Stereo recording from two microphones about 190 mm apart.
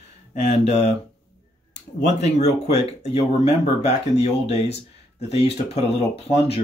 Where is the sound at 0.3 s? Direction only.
35° left (ahead or behind).